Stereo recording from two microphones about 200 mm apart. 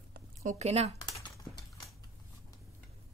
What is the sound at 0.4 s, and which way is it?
Speech, 35° right (ahead or behind).